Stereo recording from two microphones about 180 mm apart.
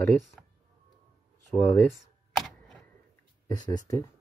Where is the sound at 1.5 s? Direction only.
10° left (ahead or behind).